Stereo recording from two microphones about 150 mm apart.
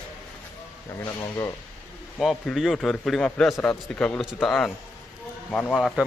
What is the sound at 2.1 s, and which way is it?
A man's voice, centre (ahead or behind).